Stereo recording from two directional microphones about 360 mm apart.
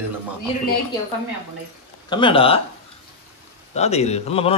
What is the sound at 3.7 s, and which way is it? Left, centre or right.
Speech, centre.